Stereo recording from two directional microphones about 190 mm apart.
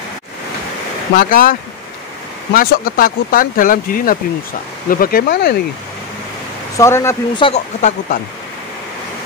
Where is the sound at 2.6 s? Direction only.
50° left (ahead or behind).